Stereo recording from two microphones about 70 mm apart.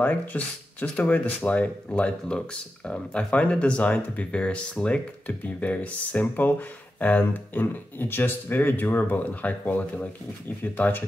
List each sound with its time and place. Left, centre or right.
0.0 s speech: left